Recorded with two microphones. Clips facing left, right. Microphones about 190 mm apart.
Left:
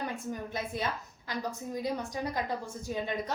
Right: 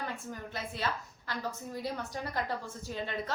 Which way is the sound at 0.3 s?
15° left (ahead or behind).